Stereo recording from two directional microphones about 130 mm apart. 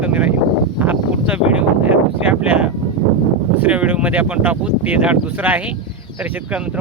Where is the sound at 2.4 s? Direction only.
10° right (ahead or behind).